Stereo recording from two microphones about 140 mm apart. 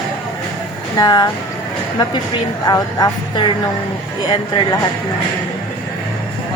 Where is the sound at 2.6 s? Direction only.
25° left (ahead or behind).